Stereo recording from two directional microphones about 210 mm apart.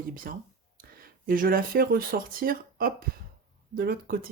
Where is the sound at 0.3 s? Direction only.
45° right (ahead or behind).